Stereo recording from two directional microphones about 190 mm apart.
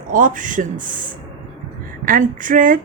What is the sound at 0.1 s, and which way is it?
Speech, 45° right (ahead or behind).